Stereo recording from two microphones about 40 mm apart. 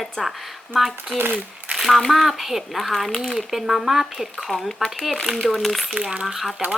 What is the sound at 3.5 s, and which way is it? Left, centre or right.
A woman's voice, centre.